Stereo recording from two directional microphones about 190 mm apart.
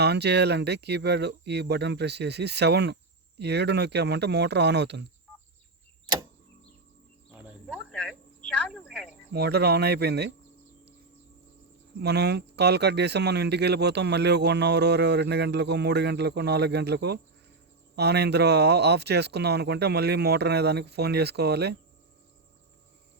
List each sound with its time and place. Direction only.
0.0 s speech: 60° right (ahead or behind)
7.7 s cricket: 5° left (ahead or behind)
8.4 s a sound: 5° left (ahead or behind)
9.3 s speech: 60° right (ahead or behind)
11.9 s speech: 60° right (ahead or behind)